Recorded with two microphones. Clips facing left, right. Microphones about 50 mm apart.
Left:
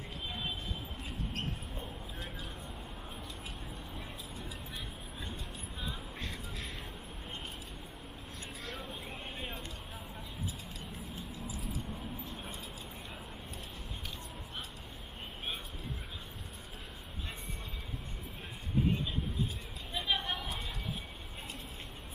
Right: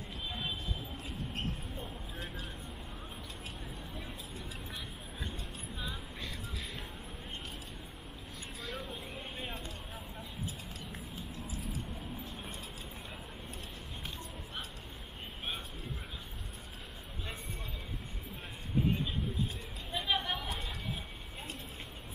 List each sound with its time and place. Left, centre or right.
6.1 s a sound: left
11.3 s vehicle: right
19.9 s chatter: centre